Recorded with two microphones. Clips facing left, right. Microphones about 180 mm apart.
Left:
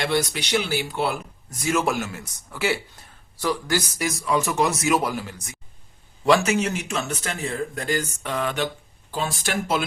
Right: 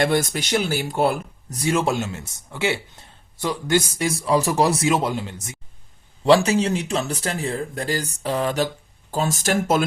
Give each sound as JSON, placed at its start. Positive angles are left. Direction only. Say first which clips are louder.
{"t": 0.0, "sound": "speech", "louder": "right 4 dB", "side_deg": -50}
{"t": 1.5, "sound": "speech", "louder": "right 2 dB", "side_deg": -30}